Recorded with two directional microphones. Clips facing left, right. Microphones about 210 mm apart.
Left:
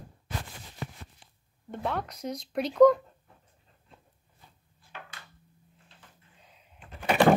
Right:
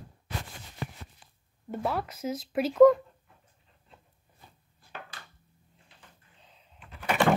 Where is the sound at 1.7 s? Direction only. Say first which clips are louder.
Right 1 dB; 5° right (ahead or behind).